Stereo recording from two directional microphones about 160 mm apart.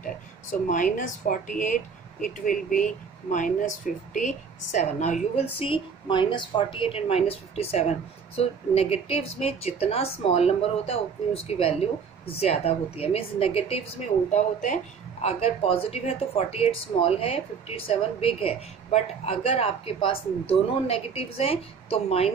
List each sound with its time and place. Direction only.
0.0 s speech: 55° left (ahead or behind); by 13.7 s 40° left (ahead or behind)
14.3 s speech: 50° left (ahead or behind)
15.2 s speech: 40° left (ahead or behind)